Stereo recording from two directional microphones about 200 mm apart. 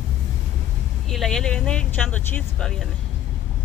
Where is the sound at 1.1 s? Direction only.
Centre (ahead or behind).